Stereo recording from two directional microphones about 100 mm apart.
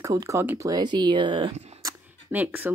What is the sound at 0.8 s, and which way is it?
Speech, 50° right (ahead or behind).